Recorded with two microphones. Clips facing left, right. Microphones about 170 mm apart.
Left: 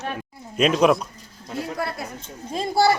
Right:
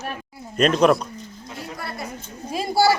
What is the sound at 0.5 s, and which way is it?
Speech, 5° left (ahead or behind).